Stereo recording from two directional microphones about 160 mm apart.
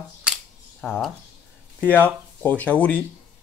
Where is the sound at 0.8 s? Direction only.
Centre (ahead or behind).